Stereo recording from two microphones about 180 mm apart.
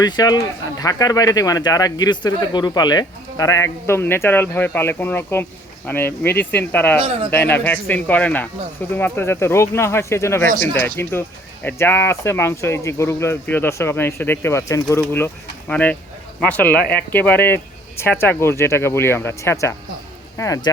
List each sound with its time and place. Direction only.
0.0 s speech: 20° left (ahead or behind)
7.0 s speech: 35° right (ahead or behind)
7.3 s speech: 10° left (ahead or behind)